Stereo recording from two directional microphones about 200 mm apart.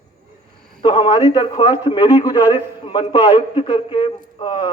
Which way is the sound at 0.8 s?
25° left (ahead or behind).